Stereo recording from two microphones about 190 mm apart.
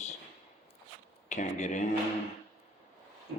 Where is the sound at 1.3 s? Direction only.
40° left (ahead or behind).